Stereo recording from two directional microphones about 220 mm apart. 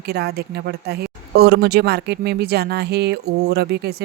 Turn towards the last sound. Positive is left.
turn(degrees=-50)  # may be behind; listen again after turning